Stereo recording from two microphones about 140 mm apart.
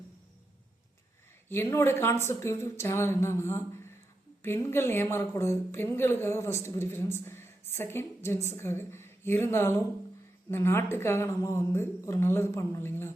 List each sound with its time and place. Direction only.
1.5 s a woman's voice: 15° left (ahead or behind)